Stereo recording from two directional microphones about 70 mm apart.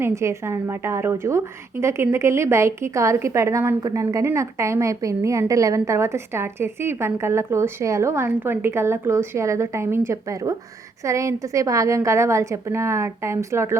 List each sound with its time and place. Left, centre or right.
0.0 s a woman's voice: right